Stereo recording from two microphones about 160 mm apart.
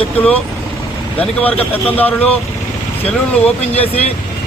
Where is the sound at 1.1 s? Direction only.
10° left (ahead or behind).